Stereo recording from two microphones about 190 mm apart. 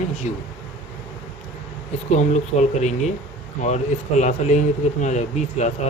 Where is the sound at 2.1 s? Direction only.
35° left (ahead or behind).